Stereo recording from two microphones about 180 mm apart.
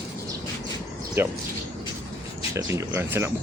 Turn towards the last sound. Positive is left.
turn(degrees=-15)  # may be behind; listen again after turning